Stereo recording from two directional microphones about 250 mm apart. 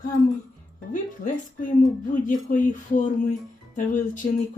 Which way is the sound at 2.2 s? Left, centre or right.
Left.